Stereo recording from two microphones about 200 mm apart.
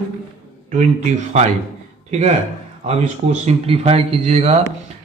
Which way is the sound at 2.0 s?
35° right (ahead or behind).